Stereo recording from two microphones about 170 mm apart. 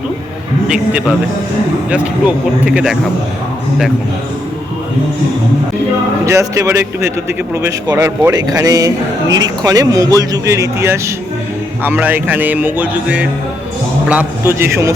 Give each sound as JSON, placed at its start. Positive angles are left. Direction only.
{"t": 0.7, "sound": "speech", "side_deg": -5}
{"t": 6.2, "sound": "a man's voice", "side_deg": -20}